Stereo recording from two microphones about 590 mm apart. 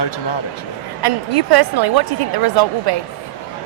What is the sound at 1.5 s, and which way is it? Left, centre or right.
Speech, right.